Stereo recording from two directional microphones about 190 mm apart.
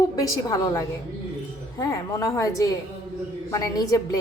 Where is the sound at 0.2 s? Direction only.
20° left (ahead or behind).